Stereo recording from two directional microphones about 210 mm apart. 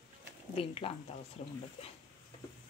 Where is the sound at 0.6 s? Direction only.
25° left (ahead or behind).